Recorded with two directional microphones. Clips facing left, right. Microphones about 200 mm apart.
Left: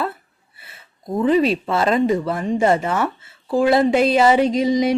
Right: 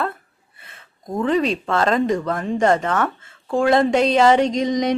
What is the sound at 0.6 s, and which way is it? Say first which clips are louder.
Speech: left 2 dB; 5° left (ahead or behind).